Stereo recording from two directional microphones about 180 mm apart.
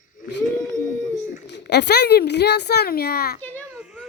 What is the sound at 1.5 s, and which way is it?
A child's voice, 70° left (ahead or behind).